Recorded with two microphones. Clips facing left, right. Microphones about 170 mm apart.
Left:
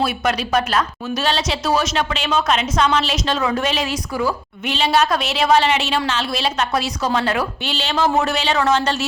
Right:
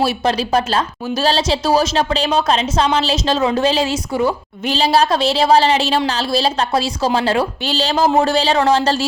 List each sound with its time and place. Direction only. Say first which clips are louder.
0.0 s speech: right 3 dB; 30° right (ahead or behind)